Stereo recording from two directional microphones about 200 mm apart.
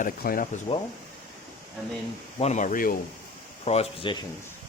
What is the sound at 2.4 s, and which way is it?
Speech, 35° left (ahead or behind).